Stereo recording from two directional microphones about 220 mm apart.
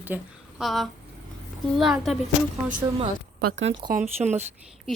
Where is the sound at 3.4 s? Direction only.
75° right (ahead or behind); by 3.8 s 55° right (ahead or behind).